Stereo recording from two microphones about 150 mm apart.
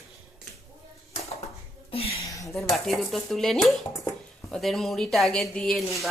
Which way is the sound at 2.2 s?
20° left (ahead or behind).